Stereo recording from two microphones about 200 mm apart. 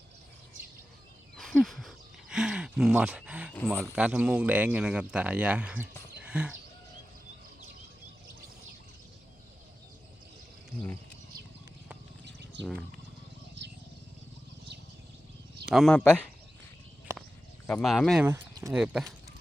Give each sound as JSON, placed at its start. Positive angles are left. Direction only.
{"t": 1.4, "sound": "a sound", "side_deg": 0}
{"t": 3.7, "sound": "speech", "side_deg": -5}
{"t": 6.2, "sound": "chicken", "side_deg": -5}
{"t": 12.2, "sound": "bird", "side_deg": -60}
{"t": 15.6, "sound": "speech", "side_deg": 0}
{"t": 17.7, "sound": "speech", "side_deg": 5}
{"t": 18.3, "sound": "speech", "side_deg": -15}
{"t": 18.8, "sound": "speech", "side_deg": 0}